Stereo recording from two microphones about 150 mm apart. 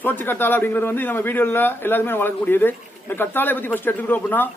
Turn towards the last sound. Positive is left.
turn(degrees=10)  # may be behind; listen again after turning